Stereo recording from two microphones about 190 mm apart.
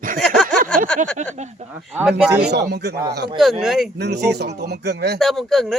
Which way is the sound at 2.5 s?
60° right (ahead or behind).